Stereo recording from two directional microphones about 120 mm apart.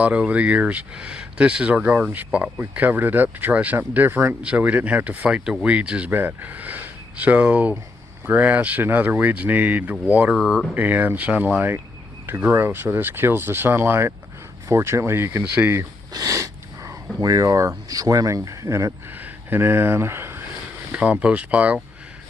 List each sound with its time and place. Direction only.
0.0 s speech: 10° right (ahead or behind)
10.8 s speech: 15° right (ahead or behind)